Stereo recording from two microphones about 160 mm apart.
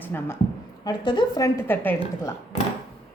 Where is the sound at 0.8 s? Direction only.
25° left (ahead or behind).